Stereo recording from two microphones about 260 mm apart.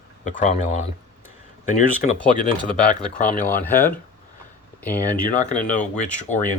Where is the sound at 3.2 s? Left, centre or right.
Left.